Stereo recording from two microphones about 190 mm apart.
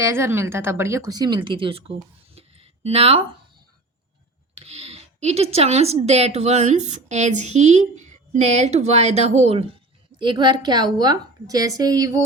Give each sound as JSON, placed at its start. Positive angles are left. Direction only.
{"t": 0.0, "sound": "speech", "side_deg": -15}
{"t": 4.5, "sound": "speech", "side_deg": -30}
{"t": 10.2, "sound": "a woman's voice", "side_deg": -25}